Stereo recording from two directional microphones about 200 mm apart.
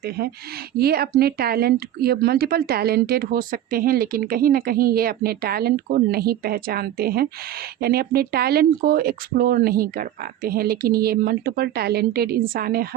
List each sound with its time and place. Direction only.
0.8 s speech: 50° right (ahead or behind)